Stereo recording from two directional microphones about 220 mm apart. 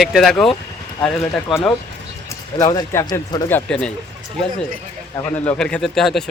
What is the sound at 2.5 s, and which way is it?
Speech, 15° left (ahead or behind).